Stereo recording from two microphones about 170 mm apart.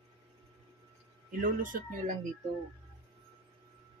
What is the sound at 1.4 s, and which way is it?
Speech, 50° right (ahead or behind).